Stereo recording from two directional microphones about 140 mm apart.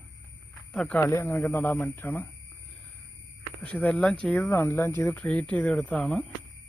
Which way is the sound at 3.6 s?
10° left (ahead or behind).